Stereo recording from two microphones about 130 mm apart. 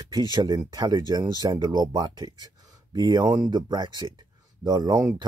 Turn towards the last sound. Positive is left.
turn(degrees=-30)  # may be behind; listen again after turning